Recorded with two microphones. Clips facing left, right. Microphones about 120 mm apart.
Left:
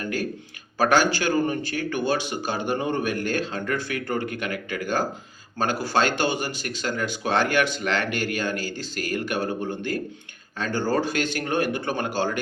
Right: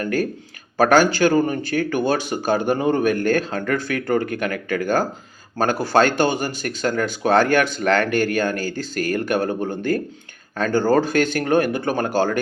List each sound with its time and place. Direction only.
0.0 s speech: 45° right (ahead or behind)